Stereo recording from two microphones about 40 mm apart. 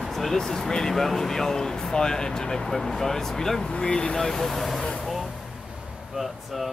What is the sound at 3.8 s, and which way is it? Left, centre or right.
Speech, left.